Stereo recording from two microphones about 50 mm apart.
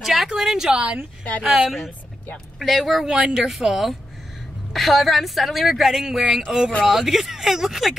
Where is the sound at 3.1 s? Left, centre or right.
Centre.